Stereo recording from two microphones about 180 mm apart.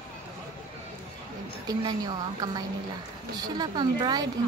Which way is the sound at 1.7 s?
25° right (ahead or behind).